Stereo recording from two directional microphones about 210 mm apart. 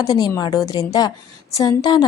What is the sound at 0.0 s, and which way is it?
A woman's voice, 15° left (ahead or behind).